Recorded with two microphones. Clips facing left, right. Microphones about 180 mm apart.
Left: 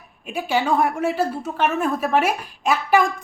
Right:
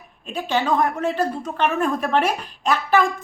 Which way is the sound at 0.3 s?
10° left (ahead or behind).